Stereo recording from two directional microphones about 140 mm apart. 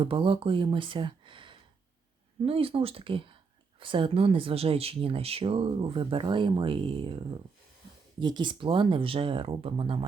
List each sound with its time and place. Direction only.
0.0 s speech: 40° right (ahead or behind)
8.2 s speech: 35° right (ahead or behind)